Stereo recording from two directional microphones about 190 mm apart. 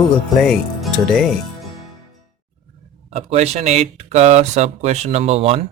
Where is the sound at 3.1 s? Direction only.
35° right (ahead or behind).